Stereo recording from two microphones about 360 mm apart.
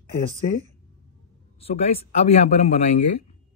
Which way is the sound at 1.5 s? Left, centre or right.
Centre.